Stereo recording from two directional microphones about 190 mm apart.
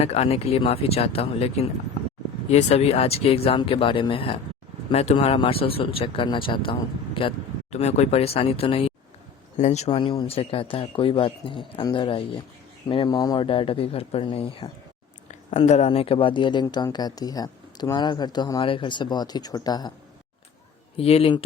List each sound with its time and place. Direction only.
0.0 s speech: 35° left (ahead or behind)
20.9 s speech: 30° left (ahead or behind)